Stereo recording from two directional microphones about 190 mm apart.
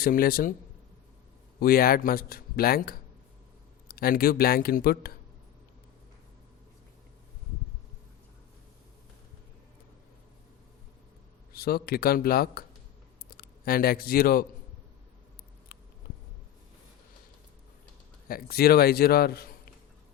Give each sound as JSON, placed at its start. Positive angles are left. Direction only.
{"t": 0.0, "sound": "a man's voice", "side_deg": 50}
{"t": 1.5, "sound": "a man's voice", "side_deg": 50}
{"t": 11.5, "sound": "a man's voice", "side_deg": 55}
{"t": 18.3, "sound": "a man's voice", "side_deg": 50}